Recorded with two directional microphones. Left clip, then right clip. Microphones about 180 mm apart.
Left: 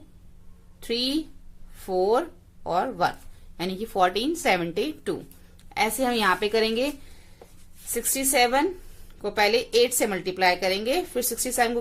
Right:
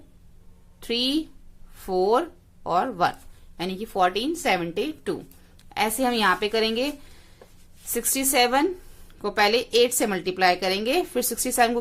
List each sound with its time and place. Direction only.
0.8 s a woman's voice: 15° right (ahead or behind)
3.6 s a woman's voice: 5° right (ahead or behind)
7.9 s a woman's voice: 25° right (ahead or behind)